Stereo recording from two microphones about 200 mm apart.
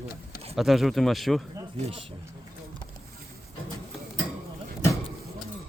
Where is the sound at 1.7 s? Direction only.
30° right (ahead or behind).